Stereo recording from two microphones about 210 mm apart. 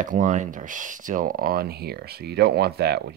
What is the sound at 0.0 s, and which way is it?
Speech, 40° right (ahead or behind).